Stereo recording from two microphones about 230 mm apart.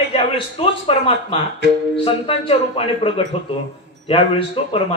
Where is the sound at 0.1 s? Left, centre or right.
Left.